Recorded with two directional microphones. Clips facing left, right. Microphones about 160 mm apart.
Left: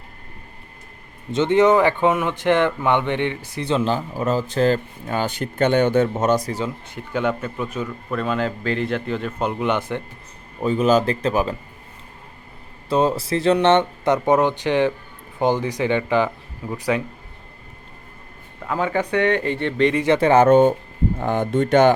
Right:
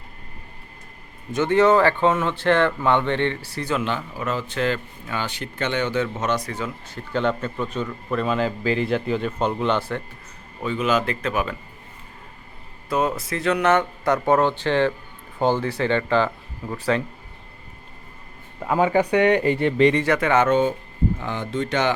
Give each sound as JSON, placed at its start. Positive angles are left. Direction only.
{"t": 1.3, "sound": "speech", "side_deg": 20}
{"t": 6.7, "sound": "speech", "side_deg": 15}
{"t": 10.6, "sound": "speech", "side_deg": 40}
{"t": 12.9, "sound": "speech", "side_deg": 30}
{"t": 18.6, "sound": "speech", "side_deg": -15}
{"t": 20.1, "sound": "speech", "side_deg": 30}
{"t": 20.5, "sound": "speech", "side_deg": 50}